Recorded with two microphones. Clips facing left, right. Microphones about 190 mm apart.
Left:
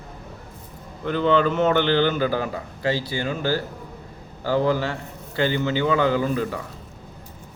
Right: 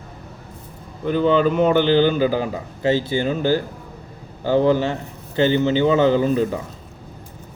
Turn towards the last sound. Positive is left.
turn(degrees=-20)  # may be behind; listen again after turning